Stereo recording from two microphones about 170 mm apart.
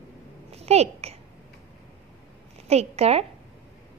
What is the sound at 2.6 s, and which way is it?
Speech, 40° right (ahead or behind).